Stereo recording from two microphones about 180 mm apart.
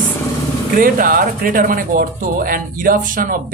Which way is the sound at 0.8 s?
50° right (ahead or behind).